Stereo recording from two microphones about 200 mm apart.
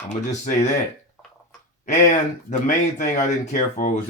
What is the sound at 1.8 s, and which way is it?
Speech, 40° left (ahead or behind).